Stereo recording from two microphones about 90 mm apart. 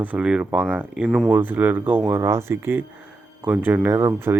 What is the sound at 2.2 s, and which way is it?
Speech, 30° right (ahead or behind).